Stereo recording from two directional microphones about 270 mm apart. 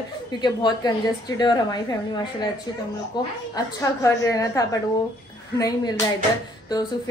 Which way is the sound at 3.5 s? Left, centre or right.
Centre.